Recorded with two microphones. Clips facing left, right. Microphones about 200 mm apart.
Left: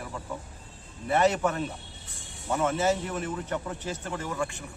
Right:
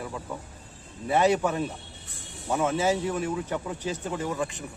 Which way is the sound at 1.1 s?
10° right (ahead or behind).